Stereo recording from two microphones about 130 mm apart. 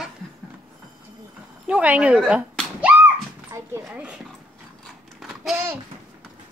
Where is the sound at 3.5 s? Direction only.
20° right (ahead or behind).